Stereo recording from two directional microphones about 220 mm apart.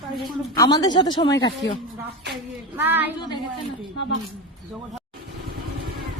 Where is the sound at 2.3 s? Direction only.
10° right (ahead or behind).